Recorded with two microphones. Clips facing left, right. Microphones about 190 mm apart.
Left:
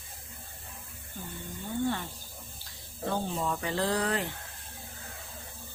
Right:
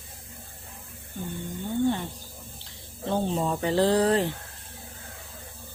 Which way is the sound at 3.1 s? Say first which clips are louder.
Right 6 dB; 30° right (ahead or behind).